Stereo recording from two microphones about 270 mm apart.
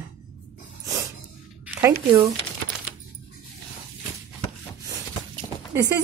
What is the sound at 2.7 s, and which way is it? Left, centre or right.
Music, centre.